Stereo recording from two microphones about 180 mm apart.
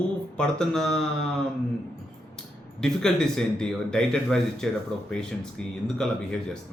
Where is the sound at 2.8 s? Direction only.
5° left (ahead or behind).